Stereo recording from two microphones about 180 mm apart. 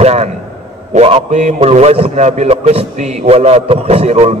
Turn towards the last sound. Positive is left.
turn(degrees=-35)  # may be behind; listen again after turning